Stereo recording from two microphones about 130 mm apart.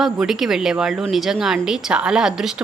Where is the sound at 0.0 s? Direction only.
5° right (ahead or behind).